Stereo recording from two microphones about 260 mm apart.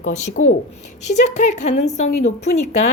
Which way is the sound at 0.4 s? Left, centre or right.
Left.